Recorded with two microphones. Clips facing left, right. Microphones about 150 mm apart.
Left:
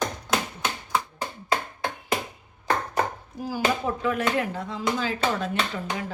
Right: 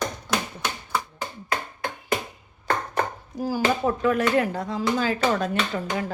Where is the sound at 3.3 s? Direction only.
40° right (ahead or behind).